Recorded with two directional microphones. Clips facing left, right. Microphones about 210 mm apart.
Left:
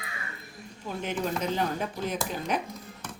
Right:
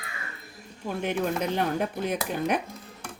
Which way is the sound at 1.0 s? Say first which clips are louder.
Right 2 dB; 60° right (ahead or behind).